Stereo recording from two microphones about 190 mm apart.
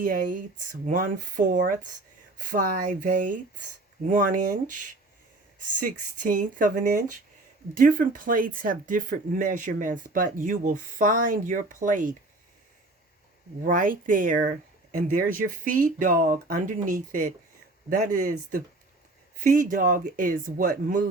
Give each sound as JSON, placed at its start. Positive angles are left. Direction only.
{"t": 0.0, "sound": "speech", "side_deg": -45}
{"t": 13.6, "sound": "speech", "side_deg": -45}